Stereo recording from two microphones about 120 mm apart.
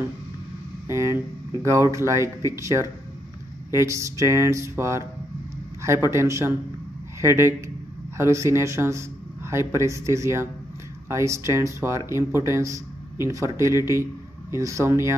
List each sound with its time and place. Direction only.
0.8 s a man's voice: 25° right (ahead or behind)